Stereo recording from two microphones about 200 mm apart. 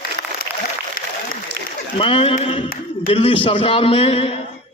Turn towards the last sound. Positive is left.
turn(degrees=30)  # may be behind; listen again after turning